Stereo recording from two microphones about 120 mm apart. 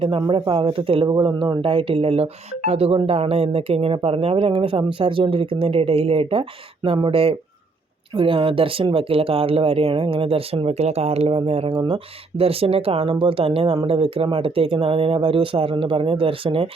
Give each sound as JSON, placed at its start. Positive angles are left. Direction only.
{"t": 0.0, "sound": "speech", "side_deg": -45}
{"t": 1.0, "sound": "speech", "side_deg": -40}